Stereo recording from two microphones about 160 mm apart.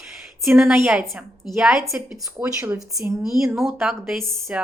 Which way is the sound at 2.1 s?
20° right (ahead or behind).